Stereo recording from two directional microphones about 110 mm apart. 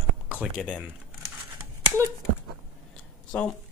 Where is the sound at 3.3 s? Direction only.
10° left (ahead or behind).